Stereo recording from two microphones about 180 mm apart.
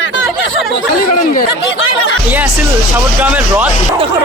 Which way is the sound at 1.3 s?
50° left (ahead or behind).